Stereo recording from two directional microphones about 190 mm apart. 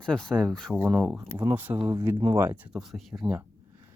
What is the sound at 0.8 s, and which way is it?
Speech, 10° right (ahead or behind).